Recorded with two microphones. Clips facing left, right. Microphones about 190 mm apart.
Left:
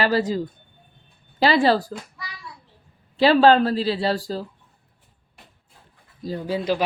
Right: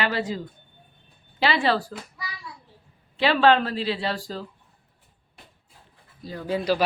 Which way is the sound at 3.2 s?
35° left (ahead or behind).